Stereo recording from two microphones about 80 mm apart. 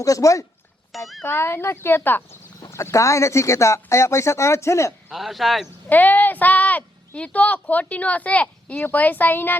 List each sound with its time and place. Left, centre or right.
0.0 s speech: left
0.9 s speech: centre
1.2 s speech: left
2.6 s speech: left
5.1 s speech: centre
5.9 s speech: left